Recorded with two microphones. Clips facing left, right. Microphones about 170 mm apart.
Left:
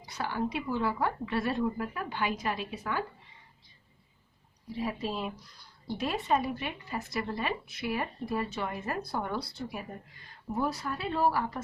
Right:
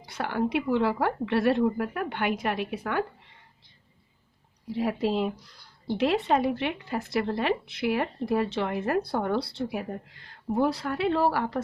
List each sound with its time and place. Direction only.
0.0 s a woman's voice: 65° right (ahead or behind)
4.7 s speech: 80° right